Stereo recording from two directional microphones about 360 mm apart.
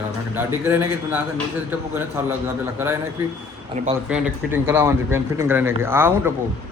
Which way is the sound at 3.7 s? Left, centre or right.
Centre.